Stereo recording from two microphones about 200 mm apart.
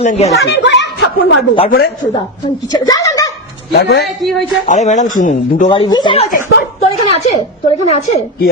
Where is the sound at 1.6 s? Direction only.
50° left (ahead or behind).